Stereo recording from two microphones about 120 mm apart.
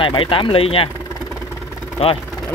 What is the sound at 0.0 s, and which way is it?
Speech, 45° left (ahead or behind).